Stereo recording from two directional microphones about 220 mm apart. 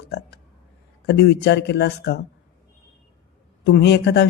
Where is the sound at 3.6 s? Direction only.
50° left (ahead or behind).